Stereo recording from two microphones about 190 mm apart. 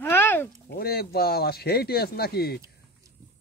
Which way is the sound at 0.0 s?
10° left (ahead or behind).